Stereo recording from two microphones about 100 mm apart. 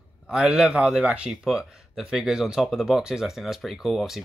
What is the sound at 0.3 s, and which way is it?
Speech, 10° right (ahead or behind).